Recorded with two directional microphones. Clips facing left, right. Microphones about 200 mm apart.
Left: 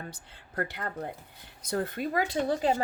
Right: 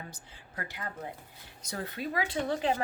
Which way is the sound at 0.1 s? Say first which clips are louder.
Left 5 dB; 60° left (ahead or behind).